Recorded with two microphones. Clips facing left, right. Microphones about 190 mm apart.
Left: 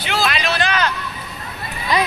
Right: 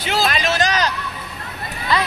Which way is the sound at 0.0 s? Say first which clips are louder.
Right 1 dB; 40° right (ahead or behind).